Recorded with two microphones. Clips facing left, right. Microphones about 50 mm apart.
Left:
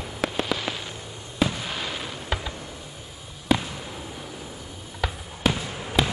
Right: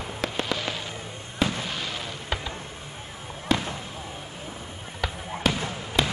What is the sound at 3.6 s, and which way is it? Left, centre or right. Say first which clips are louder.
Basketball bounce: right 2 dB; right.